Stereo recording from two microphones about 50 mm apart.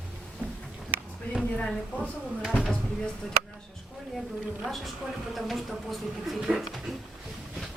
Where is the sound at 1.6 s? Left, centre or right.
Centre.